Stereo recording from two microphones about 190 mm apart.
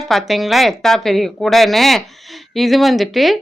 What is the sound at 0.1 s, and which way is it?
A woman's voice, centre (ahead or behind).